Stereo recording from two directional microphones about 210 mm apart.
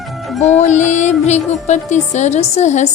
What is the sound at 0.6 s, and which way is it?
A woman's voice, 35° left (ahead or behind).